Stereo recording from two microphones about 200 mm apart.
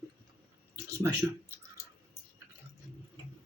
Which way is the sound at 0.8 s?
15° right (ahead or behind).